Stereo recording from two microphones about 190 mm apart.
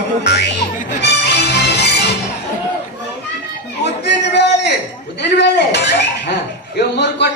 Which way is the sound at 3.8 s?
65° left (ahead or behind).